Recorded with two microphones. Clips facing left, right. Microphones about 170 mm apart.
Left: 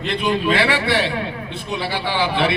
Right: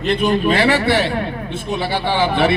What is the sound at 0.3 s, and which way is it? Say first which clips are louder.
A man's voice: right 2 dB; 45° right (ahead or behind).